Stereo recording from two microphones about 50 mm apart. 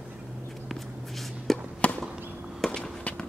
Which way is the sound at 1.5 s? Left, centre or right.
Centre.